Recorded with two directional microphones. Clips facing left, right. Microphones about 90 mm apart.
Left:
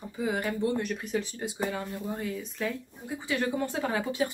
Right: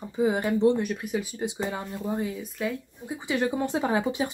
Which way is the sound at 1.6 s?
20° right (ahead or behind).